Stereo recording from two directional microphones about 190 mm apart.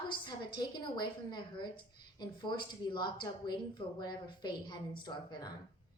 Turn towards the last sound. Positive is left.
turn(degrees=20)  # may be behind; listen again after turning